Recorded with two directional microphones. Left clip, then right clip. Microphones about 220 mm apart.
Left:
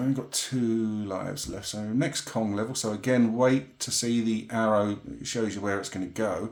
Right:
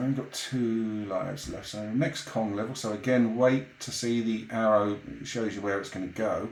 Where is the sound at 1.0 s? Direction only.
45° left (ahead or behind).